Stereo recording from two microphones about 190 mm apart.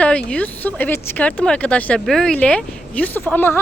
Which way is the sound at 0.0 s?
5° left (ahead or behind).